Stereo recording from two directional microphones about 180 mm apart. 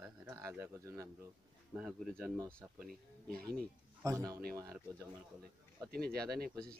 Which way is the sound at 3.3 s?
55° right (ahead or behind).